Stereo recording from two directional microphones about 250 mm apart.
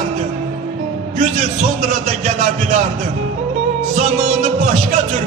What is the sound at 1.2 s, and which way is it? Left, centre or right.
Speech, right.